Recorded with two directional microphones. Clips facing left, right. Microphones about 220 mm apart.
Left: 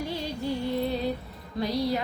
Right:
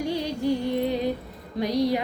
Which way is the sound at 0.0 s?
15° right (ahead or behind).